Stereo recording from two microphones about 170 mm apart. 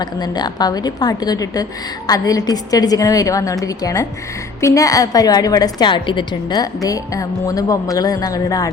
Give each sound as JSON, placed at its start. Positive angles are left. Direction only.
{"t": 0.0, "sound": "a woman's voice", "side_deg": 25}